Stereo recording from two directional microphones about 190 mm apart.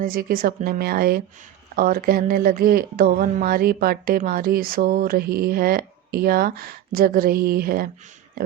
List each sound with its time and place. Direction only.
0.0 s speech: 50° right (ahead or behind)